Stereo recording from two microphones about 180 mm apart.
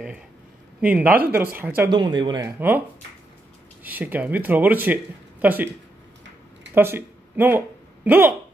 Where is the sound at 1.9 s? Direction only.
25° right (ahead or behind).